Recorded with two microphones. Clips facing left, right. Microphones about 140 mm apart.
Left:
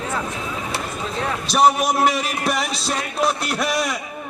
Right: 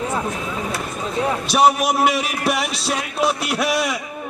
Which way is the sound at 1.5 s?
5° right (ahead or behind).